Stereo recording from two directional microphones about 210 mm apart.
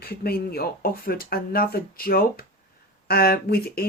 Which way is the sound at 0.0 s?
45° left (ahead or behind).